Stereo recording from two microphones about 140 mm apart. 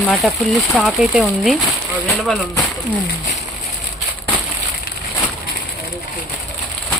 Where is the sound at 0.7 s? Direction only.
5° right (ahead or behind).